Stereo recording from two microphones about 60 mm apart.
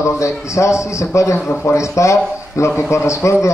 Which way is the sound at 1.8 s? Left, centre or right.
Left.